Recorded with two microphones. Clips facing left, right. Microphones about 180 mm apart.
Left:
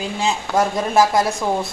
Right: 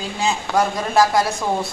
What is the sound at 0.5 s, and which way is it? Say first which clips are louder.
Speech: left 1 dB; 20° left (ahead or behind).